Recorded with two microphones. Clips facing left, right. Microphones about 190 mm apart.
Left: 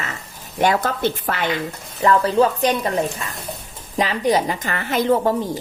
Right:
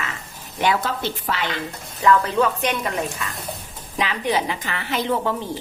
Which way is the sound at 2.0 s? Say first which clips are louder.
Left 2 dB; 35° left (ahead or behind).